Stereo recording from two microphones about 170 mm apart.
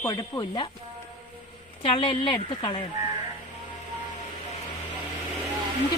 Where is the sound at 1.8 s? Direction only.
30° left (ahead or behind).